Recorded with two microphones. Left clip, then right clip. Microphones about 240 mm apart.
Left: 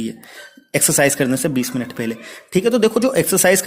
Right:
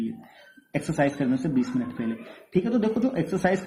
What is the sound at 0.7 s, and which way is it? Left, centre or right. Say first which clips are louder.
A man's voice: left 9 dB; left.